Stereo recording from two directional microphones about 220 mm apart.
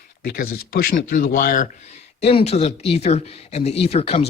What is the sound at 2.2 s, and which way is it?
Speech, 25° left (ahead or behind).